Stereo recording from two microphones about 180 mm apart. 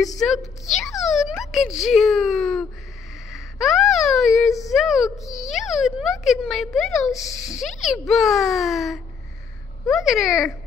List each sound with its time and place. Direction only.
0.9 s music: centre (ahead or behind)
1.4 s speech: centre (ahead or behind)